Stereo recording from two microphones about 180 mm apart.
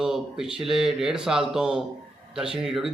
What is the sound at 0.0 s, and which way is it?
A man's voice, 5° right (ahead or behind).